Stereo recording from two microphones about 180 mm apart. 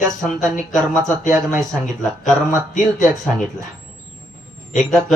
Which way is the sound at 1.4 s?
15° right (ahead or behind).